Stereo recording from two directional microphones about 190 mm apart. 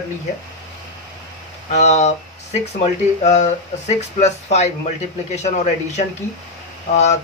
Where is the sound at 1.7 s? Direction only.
35° left (ahead or behind).